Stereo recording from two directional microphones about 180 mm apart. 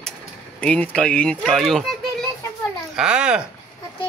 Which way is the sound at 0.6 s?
5° left (ahead or behind).